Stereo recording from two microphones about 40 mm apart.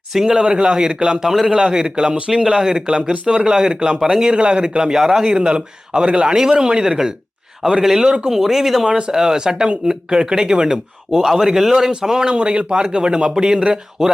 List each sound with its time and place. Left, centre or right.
0.1 s speech: centre
0.4 s speech: right
1.2 s a man's voice: centre
1.5 s speech: centre
5.2 s speech: right
6.2 s speech: centre
6.5 s speech: centre
8.9 s speech: right
11.1 s speech: centre